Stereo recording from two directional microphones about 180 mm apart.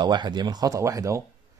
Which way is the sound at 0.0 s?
25° right (ahead or behind).